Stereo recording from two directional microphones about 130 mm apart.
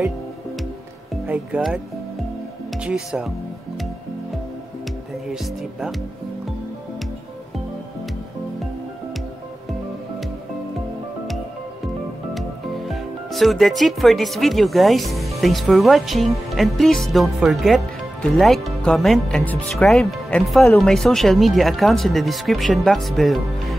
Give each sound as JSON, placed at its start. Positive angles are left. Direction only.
{"t": 1.2, "sound": "speech", "side_deg": -5}
{"t": 5.3, "sound": "speech", "side_deg": -5}
{"t": 12.4, "sound": "speech", "side_deg": 0}